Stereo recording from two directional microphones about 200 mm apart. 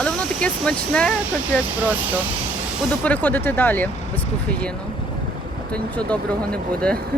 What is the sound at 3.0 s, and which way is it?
Speech, 10° left (ahead or behind).